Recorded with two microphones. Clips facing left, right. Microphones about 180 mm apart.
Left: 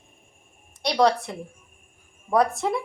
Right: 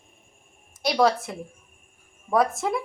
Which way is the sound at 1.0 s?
Centre (ahead or behind).